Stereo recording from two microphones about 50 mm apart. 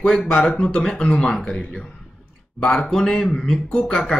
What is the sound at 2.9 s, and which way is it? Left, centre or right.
Speech, centre.